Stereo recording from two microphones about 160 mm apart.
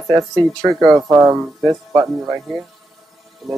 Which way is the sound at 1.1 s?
15° right (ahead or behind).